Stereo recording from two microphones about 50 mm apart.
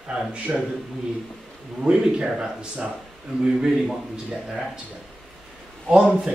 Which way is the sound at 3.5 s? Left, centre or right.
Centre.